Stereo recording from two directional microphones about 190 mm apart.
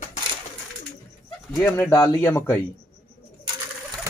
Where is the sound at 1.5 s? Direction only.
10° left (ahead or behind).